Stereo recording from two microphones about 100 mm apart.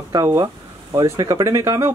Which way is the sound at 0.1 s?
40° right (ahead or behind).